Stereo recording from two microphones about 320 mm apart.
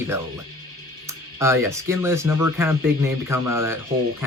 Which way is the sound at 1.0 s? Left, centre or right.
Centre.